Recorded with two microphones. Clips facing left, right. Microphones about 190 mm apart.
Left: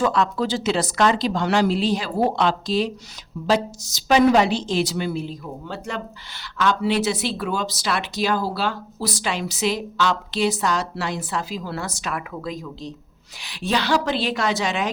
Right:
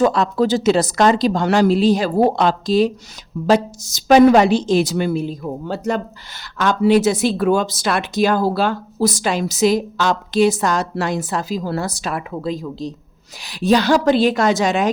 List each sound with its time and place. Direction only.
0.0 s a woman's voice: 40° right (ahead or behind)